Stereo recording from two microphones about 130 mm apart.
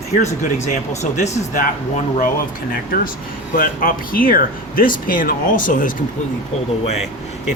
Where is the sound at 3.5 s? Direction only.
90° left.